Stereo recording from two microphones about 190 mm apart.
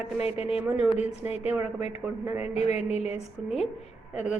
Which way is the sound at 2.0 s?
10° right (ahead or behind).